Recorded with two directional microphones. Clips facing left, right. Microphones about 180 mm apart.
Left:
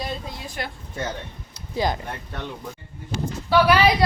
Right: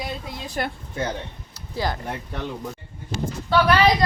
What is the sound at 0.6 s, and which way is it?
Speech, 45° right (ahead or behind).